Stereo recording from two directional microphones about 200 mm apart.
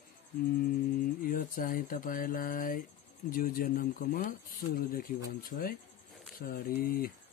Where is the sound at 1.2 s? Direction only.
45° left (ahead or behind).